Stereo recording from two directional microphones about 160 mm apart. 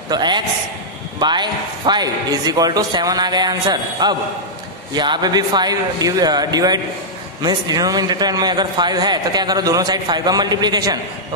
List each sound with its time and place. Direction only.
0.1 s a man's voice: 25° right (ahead or behind)